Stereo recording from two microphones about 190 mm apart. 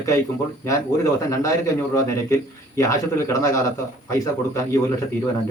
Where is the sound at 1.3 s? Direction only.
15° left (ahead or behind).